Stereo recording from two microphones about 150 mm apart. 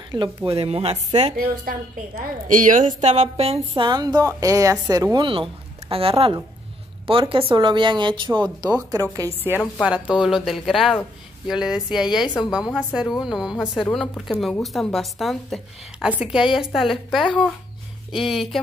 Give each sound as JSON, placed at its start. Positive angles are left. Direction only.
{"t": 0.1, "sound": "a woman's voice", "side_deg": -30}
{"t": 0.7, "sound": "speech", "side_deg": -40}
{"t": 1.6, "sound": "a woman's voice", "side_deg": -65}
{"t": 10.0, "sound": "a woman's voice", "side_deg": -5}